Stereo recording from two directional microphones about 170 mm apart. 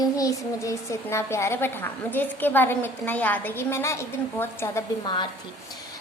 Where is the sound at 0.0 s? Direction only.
20° left (ahead or behind).